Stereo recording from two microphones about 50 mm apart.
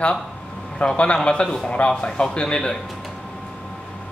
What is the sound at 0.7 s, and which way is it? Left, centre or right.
A man's voice, left.